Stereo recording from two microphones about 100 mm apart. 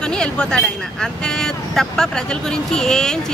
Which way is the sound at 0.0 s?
10° left (ahead or behind).